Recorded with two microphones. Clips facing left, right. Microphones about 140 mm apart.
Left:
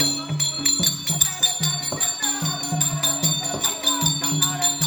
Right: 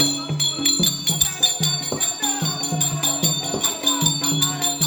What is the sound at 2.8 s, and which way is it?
Music, 15° right (ahead or behind).